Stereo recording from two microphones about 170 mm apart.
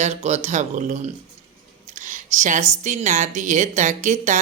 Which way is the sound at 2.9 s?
45° right (ahead or behind).